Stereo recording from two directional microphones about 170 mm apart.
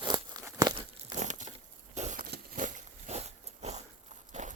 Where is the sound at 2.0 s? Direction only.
50° right (ahead or behind).